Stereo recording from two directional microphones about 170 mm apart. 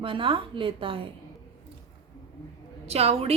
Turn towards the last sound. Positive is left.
turn(degrees=-35)  # may be behind; listen again after turning